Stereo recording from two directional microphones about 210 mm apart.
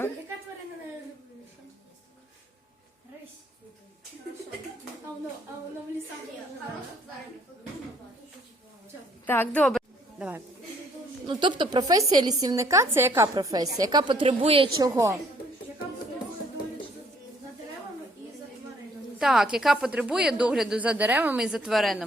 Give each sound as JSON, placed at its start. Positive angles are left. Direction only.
{"t": 9.2, "sound": "a woman's voice", "side_deg": 10}
{"t": 10.2, "sound": "speech", "side_deg": -5}
{"t": 11.3, "sound": "a woman's voice", "side_deg": -20}
{"t": 14.8, "sound": "a woman's voice", "side_deg": -15}
{"t": 19.2, "sound": "a woman's voice", "side_deg": 0}